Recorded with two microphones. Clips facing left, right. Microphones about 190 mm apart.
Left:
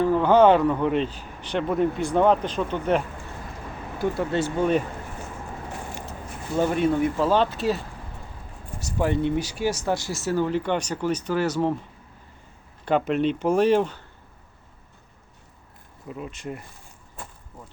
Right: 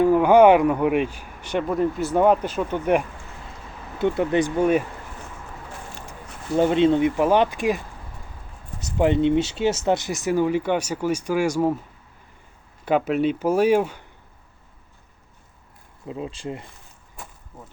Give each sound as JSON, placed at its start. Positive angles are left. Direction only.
{"t": 0.0, "sound": "speech", "side_deg": -10}
{"t": 6.6, "sound": "speech", "side_deg": -20}
{"t": 8.8, "sound": "speech", "side_deg": -20}
{"t": 12.8, "sound": "speech", "side_deg": -5}
{"t": 16.0, "sound": "speech", "side_deg": -25}